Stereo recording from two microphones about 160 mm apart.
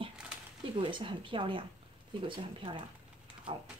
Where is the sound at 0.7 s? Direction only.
30° right (ahead or behind).